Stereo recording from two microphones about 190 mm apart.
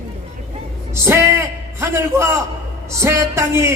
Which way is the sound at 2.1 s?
15° right (ahead or behind).